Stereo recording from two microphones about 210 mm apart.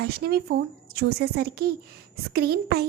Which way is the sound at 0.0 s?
50° right (ahead or behind).